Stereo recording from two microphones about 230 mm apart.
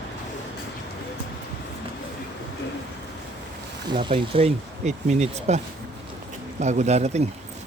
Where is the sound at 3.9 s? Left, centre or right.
Right.